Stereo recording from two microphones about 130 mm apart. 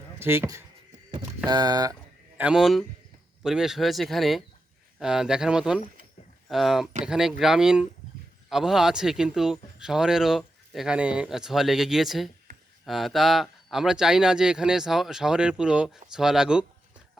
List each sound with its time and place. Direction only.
0.2 s speech: 20° right (ahead or behind)
2.4 s speech: 5° right (ahead or behind)